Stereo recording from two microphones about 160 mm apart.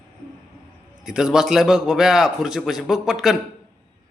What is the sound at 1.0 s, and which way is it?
A man's voice, 5° right (ahead or behind).